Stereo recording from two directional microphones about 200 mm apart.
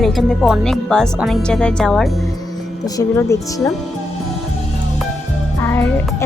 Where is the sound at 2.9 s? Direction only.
15° left (ahead or behind).